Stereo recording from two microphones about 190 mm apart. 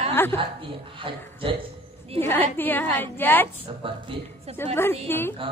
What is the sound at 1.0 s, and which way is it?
Speech, 30° right (ahead or behind).